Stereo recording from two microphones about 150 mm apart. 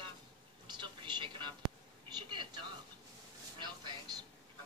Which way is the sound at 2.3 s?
30° right (ahead or behind).